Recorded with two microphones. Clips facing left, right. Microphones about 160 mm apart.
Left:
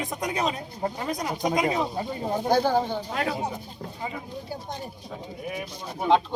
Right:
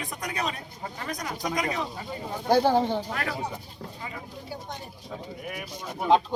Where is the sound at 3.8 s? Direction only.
25° left (ahead or behind).